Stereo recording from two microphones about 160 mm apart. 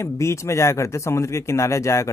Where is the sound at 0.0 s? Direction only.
15° left (ahead or behind).